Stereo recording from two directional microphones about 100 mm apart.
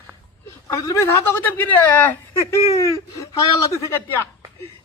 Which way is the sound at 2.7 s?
30° left (ahead or behind).